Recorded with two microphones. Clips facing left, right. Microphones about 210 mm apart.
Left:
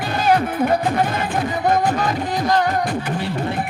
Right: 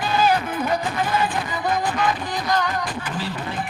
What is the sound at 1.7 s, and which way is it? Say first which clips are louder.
Music: left 2 dB; 40° left (ahead or behind).